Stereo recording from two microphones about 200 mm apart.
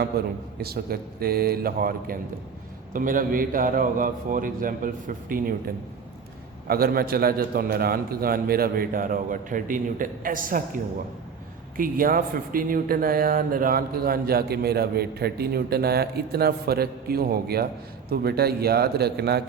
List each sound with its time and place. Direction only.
0.6 s speech: 50° right (ahead or behind)
11.8 s speech: 45° right (ahead or behind)